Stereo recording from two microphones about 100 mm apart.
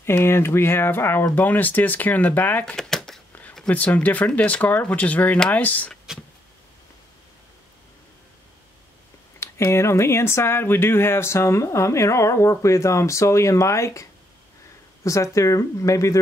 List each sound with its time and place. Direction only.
0.0 s speech: 25° left (ahead or behind)
2.6 s typewriter: 5° left (ahead or behind)
3.7 s speech: 15° left (ahead or behind)
9.4 s speech: 30° left (ahead or behind)
15.0 s speech: 30° left (ahead or behind)